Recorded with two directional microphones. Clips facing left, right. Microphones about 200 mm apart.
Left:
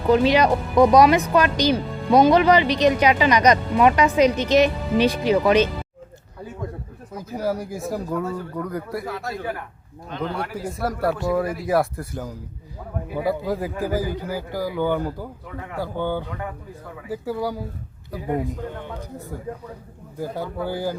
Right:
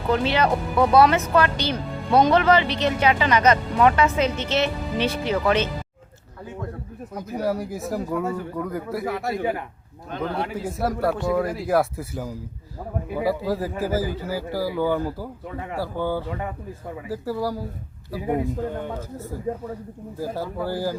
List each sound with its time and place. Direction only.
0.1 s speech: 15° left (ahead or behind)
7.3 s speech: centre (ahead or behind)
8.2 s a man's voice: 15° right (ahead or behind)
8.5 s speech: centre (ahead or behind)
9.0 s speech: 20° right (ahead or behind)
10.2 s speech: centre (ahead or behind)
19.1 s speech: centre (ahead or behind)